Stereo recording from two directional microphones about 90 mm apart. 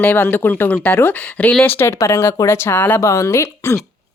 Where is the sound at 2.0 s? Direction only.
35° left (ahead or behind).